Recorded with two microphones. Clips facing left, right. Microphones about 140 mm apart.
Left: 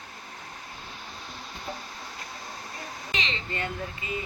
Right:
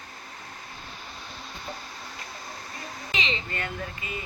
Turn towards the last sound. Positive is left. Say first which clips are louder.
# left 1 dB
turn(degrees=25)  # may be behind; listen again after turning